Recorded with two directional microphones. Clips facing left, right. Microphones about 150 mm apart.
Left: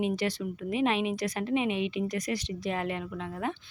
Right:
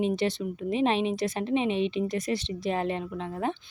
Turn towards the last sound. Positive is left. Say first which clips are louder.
# right 3 dB
turn(degrees=-30)  # may be behind; listen again after turning